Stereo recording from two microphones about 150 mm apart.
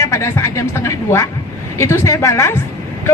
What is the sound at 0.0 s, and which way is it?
A man's voice, 20° left (ahead or behind).